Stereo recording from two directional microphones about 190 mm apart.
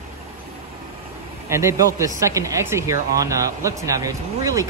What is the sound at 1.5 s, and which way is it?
Speech, 15° right (ahead or behind).